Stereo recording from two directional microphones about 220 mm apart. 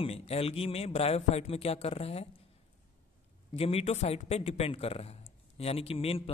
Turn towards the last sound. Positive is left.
turn(degrees=25)  # may be behind; listen again after turning